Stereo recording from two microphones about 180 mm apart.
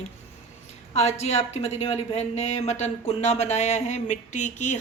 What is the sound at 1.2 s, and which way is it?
Speech, 35° left (ahead or behind).